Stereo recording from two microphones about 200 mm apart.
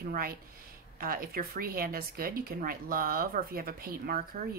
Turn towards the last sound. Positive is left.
turn(degrees=-50)  # may be behind; listen again after turning